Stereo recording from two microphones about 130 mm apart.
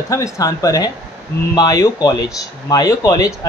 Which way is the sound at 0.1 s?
25° left (ahead or behind).